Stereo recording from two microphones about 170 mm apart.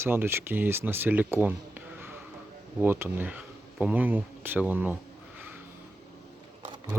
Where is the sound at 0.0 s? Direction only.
15° right (ahead or behind).